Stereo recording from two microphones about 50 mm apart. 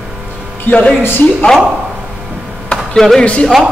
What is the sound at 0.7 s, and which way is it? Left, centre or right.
Speech, left.